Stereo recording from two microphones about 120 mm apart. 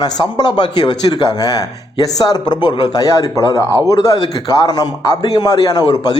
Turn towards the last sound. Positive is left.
turn(degrees=35)  # may be behind; listen again after turning